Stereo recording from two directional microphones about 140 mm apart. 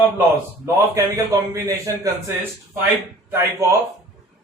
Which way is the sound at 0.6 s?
20° right (ahead or behind).